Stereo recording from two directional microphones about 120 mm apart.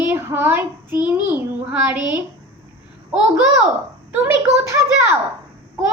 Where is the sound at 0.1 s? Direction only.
20° right (ahead or behind).